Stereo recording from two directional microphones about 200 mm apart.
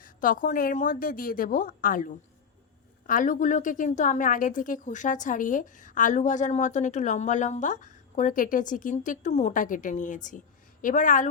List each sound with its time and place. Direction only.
0.0 s a woman's voice: 45° left (ahead or behind)